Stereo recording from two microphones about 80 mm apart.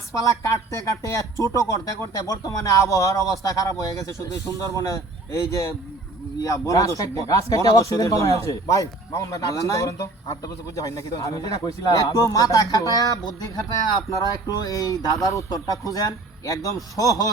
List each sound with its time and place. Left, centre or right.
0.1 s speech: left
14.2 s speech: left